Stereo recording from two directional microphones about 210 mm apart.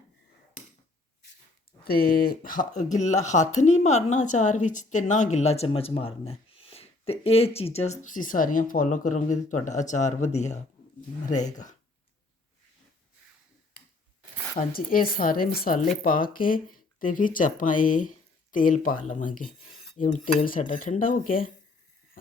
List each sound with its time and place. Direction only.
1.8 s a woman's voice: 45° left (ahead or behind)
14.7 s a woman's voice: 45° left (ahead or behind)